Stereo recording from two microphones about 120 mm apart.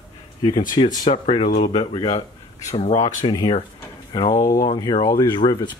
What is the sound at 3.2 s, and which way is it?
Speech, 35° left (ahead or behind).